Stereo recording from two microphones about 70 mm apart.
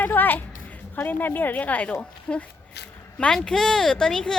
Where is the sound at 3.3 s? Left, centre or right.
Centre.